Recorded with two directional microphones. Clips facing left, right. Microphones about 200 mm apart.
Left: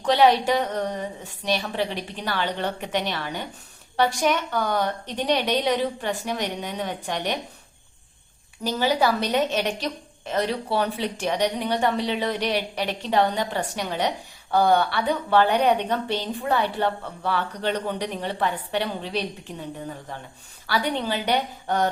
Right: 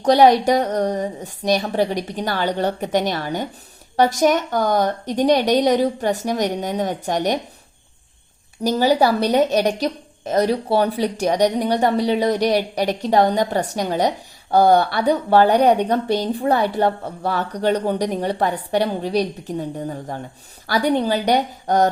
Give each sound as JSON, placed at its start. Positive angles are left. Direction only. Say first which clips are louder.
{"t": 0.0, "sound": "a woman's voice", "louder": "right 5 dB", "side_deg": -40}
{"t": 8.6, "sound": "a woman's voice", "louder": "right 6 dB", "side_deg": -40}